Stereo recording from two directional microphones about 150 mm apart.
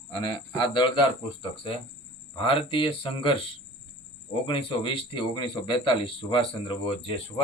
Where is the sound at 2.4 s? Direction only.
35° left (ahead or behind).